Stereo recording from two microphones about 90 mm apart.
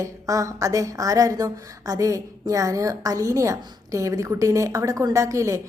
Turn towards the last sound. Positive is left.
turn(degrees=-35)  # may be behind; listen again after turning